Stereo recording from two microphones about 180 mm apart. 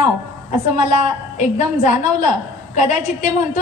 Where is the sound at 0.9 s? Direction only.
40° left (ahead or behind).